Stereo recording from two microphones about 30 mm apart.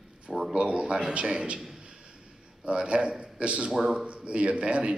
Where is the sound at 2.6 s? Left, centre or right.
Right.